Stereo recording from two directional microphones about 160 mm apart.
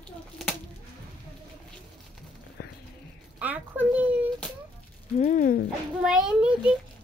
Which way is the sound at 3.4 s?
10° right (ahead or behind).